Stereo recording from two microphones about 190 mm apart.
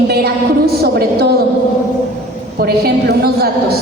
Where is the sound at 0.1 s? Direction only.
55° right (ahead or behind).